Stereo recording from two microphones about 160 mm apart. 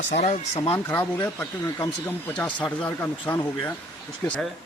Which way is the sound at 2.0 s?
10° left (ahead or behind).